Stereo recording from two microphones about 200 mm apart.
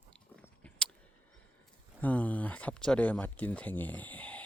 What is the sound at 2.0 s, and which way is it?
Speech, 5° left (ahead or behind).